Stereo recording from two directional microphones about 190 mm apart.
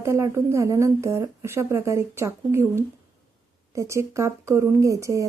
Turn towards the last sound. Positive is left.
turn(degrees=-15)  # may be behind; listen again after turning